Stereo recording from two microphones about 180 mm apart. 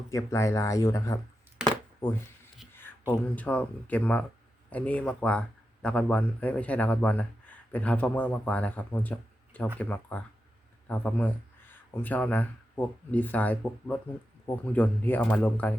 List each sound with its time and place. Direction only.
0.1 s speech: 15° left (ahead or behind)
1.6 s a sound: 5° right (ahead or behind)
3.1 s speech: 10° left (ahead or behind)